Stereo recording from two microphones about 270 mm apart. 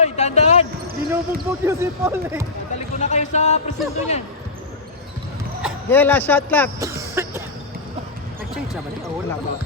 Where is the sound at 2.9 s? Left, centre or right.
Left.